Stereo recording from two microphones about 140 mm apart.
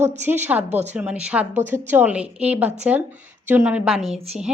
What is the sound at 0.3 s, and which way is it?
A woman's voice, 15° right (ahead or behind).